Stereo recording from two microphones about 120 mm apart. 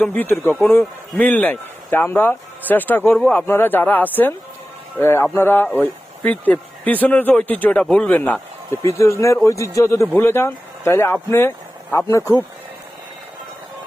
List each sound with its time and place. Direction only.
0.0 s speech: 15° left (ahead or behind)
8.8 s speech: 25° left (ahead or behind)